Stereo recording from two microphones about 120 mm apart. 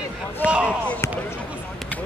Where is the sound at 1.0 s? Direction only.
25° left (ahead or behind).